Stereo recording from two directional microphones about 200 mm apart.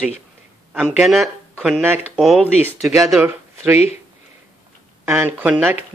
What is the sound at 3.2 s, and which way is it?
Speech, 10° right (ahead or behind).